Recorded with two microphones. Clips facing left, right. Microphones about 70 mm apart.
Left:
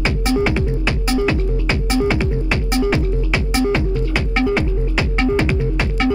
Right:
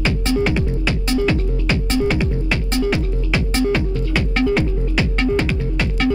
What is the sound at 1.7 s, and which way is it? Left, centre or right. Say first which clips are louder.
Music: left 1 dB; left.